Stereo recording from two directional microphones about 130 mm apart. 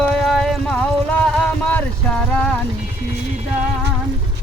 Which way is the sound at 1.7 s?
10° left (ahead or behind).